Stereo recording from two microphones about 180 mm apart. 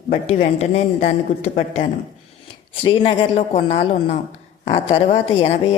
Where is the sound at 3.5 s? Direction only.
35° left (ahead or behind).